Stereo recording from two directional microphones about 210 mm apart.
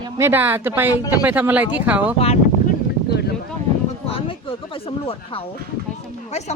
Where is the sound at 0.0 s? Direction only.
10° right (ahead or behind).